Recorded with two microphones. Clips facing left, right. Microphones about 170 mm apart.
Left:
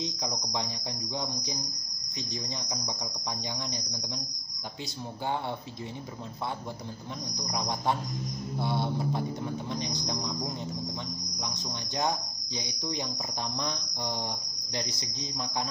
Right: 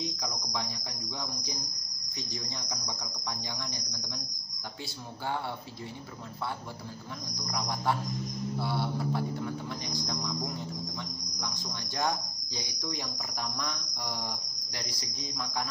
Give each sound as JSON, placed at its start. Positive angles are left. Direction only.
{"t": 0.0, "sound": "cricket", "side_deg": 20}
{"t": 7.3, "sound": "cricket", "side_deg": 20}